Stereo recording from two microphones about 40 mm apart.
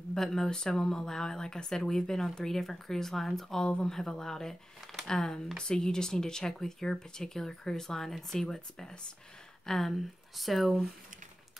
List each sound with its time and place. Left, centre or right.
0.1 s speech: centre
3.6 s speech: centre